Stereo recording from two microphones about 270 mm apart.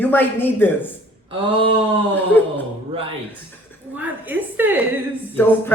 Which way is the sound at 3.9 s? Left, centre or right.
Centre.